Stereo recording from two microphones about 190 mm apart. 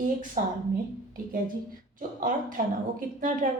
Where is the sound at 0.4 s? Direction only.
45° right (ahead or behind).